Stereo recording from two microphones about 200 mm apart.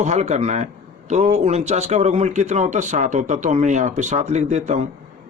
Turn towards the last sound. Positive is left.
turn(degrees=-35)  # may be behind; listen again after turning